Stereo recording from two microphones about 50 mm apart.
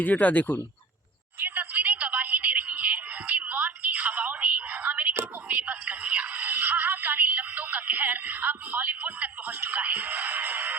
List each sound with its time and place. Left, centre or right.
0.0 s speech: left
1.4 s a sound: right
5.5 s music: right